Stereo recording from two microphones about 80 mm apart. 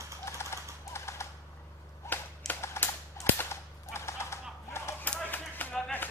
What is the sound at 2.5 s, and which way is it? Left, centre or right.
Typewriter, left.